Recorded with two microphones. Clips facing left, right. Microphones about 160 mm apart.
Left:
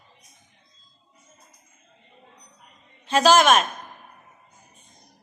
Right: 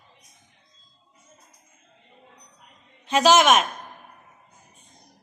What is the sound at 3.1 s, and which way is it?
Speech, 15° right (ahead or behind).